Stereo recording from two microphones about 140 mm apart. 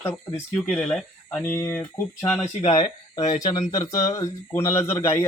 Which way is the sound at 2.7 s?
30° left (ahead or behind).